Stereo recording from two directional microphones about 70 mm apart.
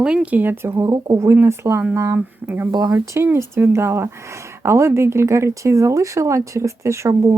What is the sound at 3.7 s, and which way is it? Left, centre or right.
Speech, right.